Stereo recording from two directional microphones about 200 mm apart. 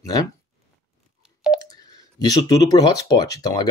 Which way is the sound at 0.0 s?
20° left (ahead or behind).